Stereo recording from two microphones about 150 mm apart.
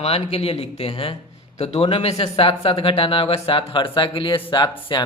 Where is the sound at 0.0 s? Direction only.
40° left (ahead or behind).